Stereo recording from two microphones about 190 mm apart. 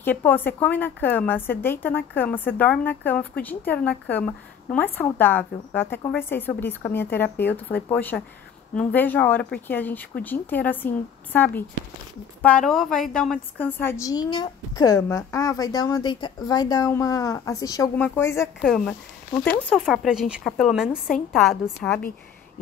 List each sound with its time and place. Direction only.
0.0 s a woman's voice: 10° left (ahead or behind)